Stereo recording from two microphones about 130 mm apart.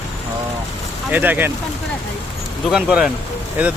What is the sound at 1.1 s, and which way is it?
Speech, 15° right (ahead or behind).